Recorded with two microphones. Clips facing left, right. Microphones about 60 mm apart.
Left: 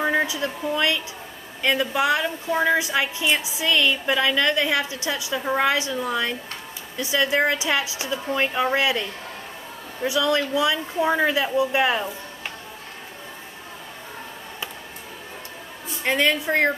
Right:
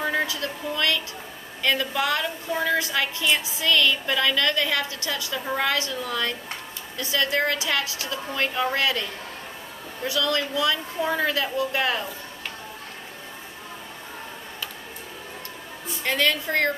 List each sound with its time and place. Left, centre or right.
0.0 s a woman's voice: centre
10.0 s speech: centre
16.0 s a woman's voice: centre